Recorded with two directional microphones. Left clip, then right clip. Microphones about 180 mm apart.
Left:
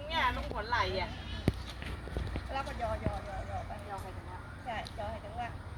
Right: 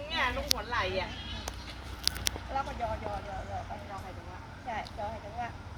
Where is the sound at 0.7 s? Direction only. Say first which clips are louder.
Left 4 dB; 10° right (ahead or behind).